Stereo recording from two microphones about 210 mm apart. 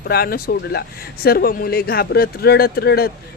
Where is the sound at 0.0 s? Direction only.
50° left (ahead or behind).